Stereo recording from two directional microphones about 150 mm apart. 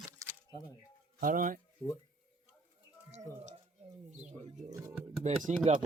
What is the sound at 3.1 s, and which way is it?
Speech, 50° right (ahead or behind).